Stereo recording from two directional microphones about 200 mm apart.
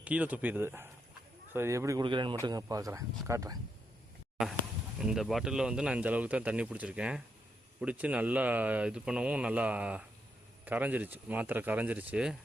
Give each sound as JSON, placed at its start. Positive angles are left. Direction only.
{"t": 0.0, "sound": "speech", "side_deg": -5}
{"t": 4.4, "sound": "speech", "side_deg": 0}